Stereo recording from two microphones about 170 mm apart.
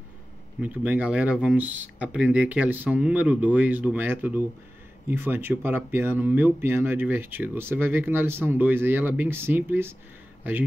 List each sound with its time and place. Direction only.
0.6 s speech: 10° right (ahead or behind)